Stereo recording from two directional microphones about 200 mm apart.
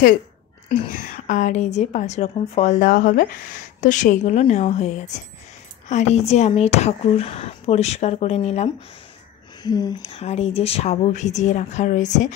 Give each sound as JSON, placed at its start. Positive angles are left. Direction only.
{"t": 0.8, "sound": "speech", "side_deg": 40}
{"t": 9.6, "sound": "speech", "side_deg": 20}